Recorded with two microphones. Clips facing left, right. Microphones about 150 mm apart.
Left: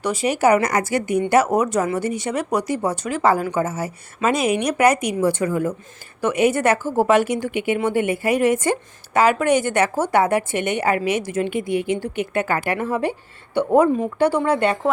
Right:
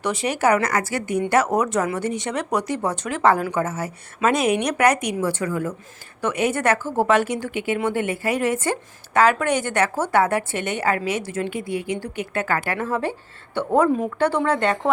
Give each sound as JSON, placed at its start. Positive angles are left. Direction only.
{"t": 0.0, "sound": "a woman's voice", "side_deg": 0}
{"t": 5.3, "sound": "a woman's voice", "side_deg": 20}